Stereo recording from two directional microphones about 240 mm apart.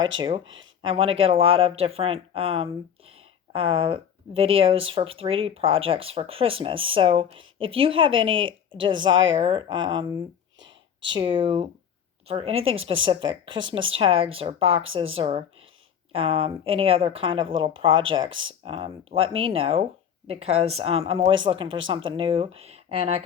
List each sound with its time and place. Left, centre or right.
0.2 s speech: right
0.4 s speech: right
0.8 s speech: right
10.6 s a sound: right
11.1 s speech: centre